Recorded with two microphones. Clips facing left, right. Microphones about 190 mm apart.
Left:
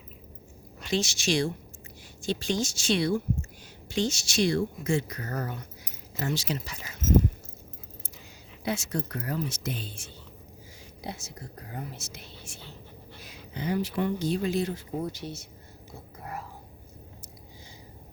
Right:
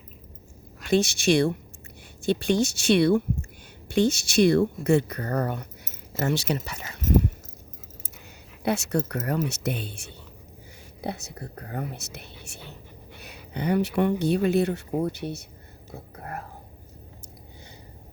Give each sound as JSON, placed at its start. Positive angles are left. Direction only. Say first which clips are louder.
{"t": 0.9, "sound": "speech", "louder": "right 7 dB", "side_deg": -55}
{"t": 8.6, "sound": "speech", "louder": "right 6 dB", "side_deg": -65}
{"t": 16.1, "sound": "whispering", "louder": "right 2 dB", "side_deg": -55}